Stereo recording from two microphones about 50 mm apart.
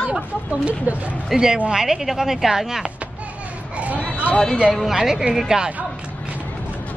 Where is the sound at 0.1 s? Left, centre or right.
Right.